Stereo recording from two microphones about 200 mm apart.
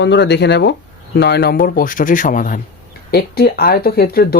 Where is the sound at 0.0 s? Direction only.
60° left (ahead or behind).